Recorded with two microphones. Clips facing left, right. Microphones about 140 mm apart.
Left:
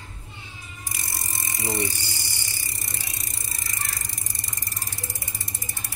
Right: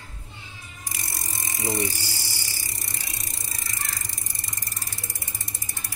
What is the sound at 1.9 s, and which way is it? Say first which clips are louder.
Vehicle: right 1 dB; 20° left (ahead or behind).